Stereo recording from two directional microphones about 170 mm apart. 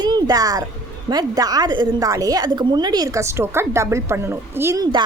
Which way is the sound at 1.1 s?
20° right (ahead or behind).